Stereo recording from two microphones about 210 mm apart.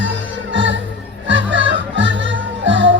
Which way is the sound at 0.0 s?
60° right (ahead or behind).